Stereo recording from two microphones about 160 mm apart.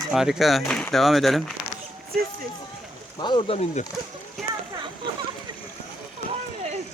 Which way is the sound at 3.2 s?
30° left (ahead or behind).